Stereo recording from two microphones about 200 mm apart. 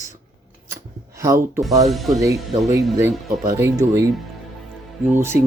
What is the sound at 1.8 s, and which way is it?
Speech, centre (ahead or behind).